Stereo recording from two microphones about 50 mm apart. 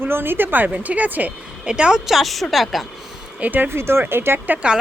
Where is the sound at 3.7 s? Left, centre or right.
Right.